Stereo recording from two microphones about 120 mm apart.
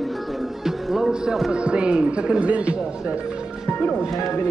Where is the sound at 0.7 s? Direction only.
Centre (ahead or behind).